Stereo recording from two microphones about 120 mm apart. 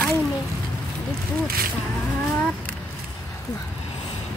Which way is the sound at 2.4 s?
10° left (ahead or behind).